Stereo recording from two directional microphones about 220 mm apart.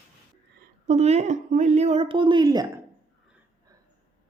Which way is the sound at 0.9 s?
30° right (ahead or behind).